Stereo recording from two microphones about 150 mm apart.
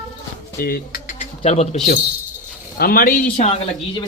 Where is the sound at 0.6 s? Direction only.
85° left.